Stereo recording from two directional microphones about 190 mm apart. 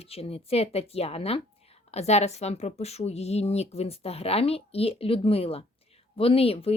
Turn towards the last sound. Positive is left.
turn(degrees=30)  # may be behind; listen again after turning